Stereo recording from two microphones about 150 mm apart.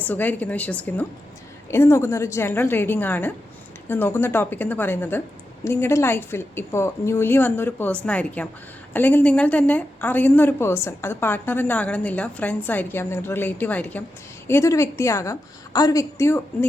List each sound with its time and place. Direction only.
0.0 s a woman's voice: 10° left (ahead or behind)